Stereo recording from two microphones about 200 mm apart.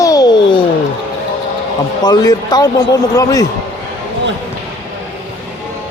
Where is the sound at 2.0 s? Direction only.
20° left (ahead or behind).